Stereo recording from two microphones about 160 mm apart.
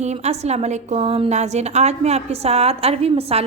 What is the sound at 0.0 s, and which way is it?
A woman's voice, 45° right (ahead or behind).